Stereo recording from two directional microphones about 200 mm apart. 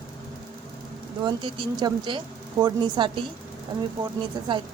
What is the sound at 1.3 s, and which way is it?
A woman's voice, 25° right (ahead or behind).